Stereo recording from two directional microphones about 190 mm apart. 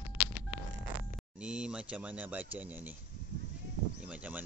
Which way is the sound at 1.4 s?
5° right (ahead or behind).